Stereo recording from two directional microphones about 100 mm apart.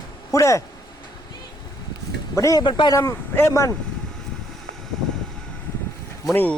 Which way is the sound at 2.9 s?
30° left (ahead or behind).